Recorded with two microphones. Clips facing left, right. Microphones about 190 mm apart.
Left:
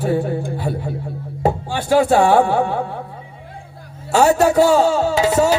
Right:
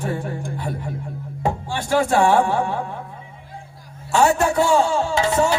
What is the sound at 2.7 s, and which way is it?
Speech, 30° left (ahead or behind).